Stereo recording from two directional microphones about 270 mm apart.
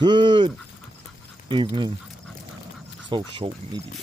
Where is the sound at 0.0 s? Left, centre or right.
Centre.